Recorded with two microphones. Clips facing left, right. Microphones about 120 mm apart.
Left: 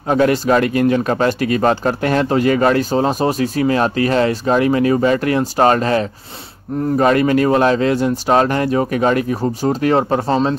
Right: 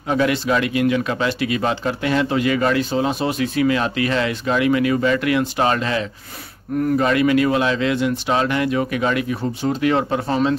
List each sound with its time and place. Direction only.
0.1 s speech: 40° left (ahead or behind)